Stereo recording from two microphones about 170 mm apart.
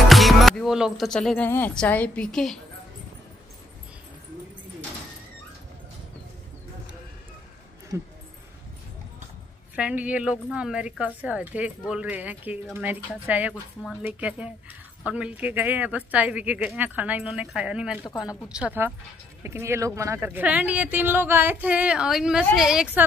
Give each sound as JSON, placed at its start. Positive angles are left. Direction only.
{"t": 0.1, "sound": "music", "side_deg": 0}
{"t": 1.5, "sound": "a woman's voice", "side_deg": 10}
{"t": 7.9, "sound": "speech", "side_deg": -15}
{"t": 9.8, "sound": "speech", "side_deg": -10}
{"t": 18.0, "sound": "a woman's voice", "side_deg": 20}
{"t": 18.5, "sound": "speech", "side_deg": -10}